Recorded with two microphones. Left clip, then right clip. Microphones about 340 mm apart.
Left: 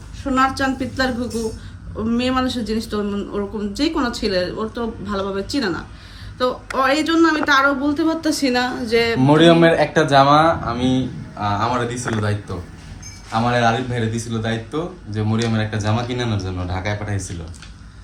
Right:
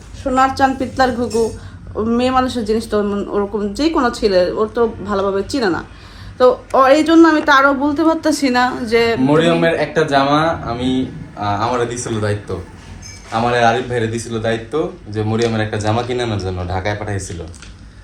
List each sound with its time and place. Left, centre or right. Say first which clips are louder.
0.2 s a woman's voice: right 5 dB; centre
9.2 s a woman's voice: left 1 dB; left